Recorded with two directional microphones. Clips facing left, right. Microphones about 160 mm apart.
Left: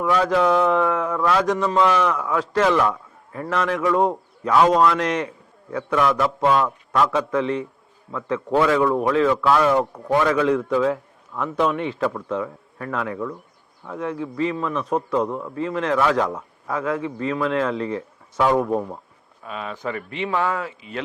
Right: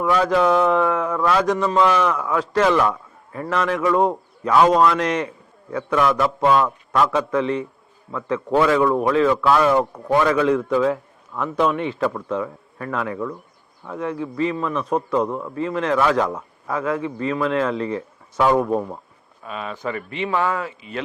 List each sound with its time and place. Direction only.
0.1 s a man's voice: 10° right (ahead or behind)
9.8 s a man's voice: 30° right (ahead or behind)
10.1 s a man's voice: 15° right (ahead or behind)
15.5 s a man's voice: 15° right (ahead or behind)
18.6 s a man's voice: 30° right (ahead or behind)
19.5 s a man's voice: 15° right (ahead or behind)